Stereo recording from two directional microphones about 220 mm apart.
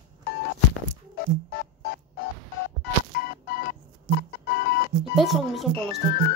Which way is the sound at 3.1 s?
40° left (ahead or behind).